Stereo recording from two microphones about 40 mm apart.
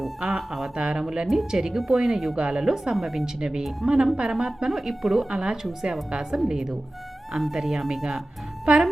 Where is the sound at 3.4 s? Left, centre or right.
Centre.